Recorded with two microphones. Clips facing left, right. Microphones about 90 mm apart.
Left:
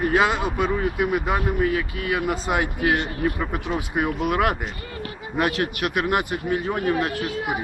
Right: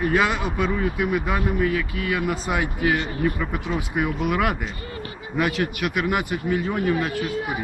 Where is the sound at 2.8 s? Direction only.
55° left (ahead or behind).